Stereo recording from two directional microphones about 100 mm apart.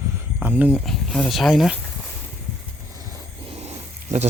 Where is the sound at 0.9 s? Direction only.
5° left (ahead or behind).